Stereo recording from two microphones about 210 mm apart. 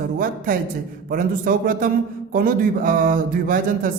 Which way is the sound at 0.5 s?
40° right (ahead or behind).